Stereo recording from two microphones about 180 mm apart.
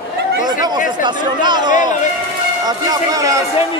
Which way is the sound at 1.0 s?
25° right (ahead or behind).